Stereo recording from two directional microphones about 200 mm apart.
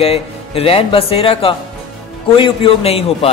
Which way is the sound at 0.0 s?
30° left (ahead or behind).